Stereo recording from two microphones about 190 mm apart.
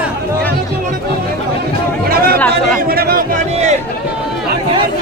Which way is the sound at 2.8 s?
55° right (ahead or behind).